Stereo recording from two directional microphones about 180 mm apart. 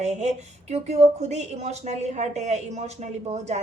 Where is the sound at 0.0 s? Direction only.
40° right (ahead or behind).